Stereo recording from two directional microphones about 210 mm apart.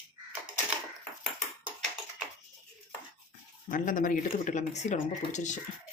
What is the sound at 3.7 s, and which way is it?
Speech, 40° left (ahead or behind).